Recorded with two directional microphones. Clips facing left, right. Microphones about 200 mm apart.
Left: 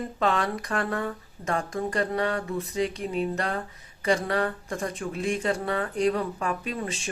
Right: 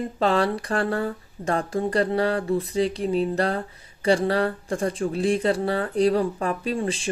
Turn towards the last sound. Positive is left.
turn(degrees=-30)  # may be behind; listen again after turning